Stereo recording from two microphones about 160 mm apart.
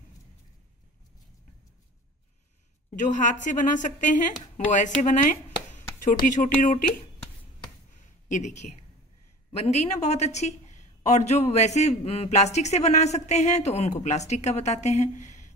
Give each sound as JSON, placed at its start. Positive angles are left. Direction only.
{"t": 3.0, "sound": "a man's voice", "side_deg": 50}
{"t": 8.3, "sound": "a man's voice", "side_deg": 45}
{"t": 9.7, "sound": "a woman's voice", "side_deg": 45}